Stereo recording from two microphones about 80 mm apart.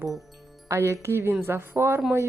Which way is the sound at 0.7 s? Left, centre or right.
Right.